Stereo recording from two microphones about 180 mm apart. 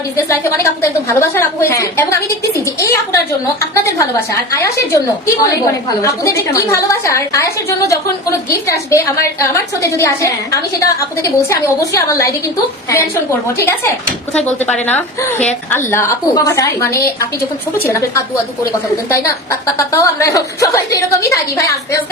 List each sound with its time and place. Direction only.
0.3 s a woman's voice: 15° left (ahead or behind)
14.3 s a woman's voice: 5° left (ahead or behind)